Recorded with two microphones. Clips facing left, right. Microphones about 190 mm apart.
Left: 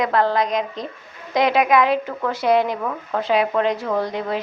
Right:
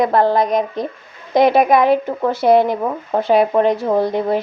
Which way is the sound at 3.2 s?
55° right (ahead or behind).